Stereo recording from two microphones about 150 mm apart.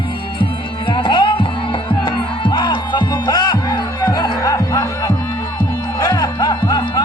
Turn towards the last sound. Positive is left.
turn(degrees=30)  # may be behind; listen again after turning